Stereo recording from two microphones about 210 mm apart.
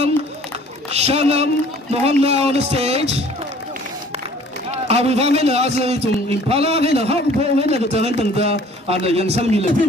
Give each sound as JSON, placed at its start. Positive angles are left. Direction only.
{"t": 0.8, "sound": "speech", "side_deg": -30}
{"t": 4.6, "sound": "a man's voice", "side_deg": -30}